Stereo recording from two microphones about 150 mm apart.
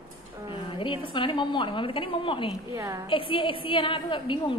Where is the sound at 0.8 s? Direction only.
35° left (ahead or behind).